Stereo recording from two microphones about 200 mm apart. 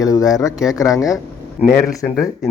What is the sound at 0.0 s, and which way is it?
Speech, 15° left (ahead or behind).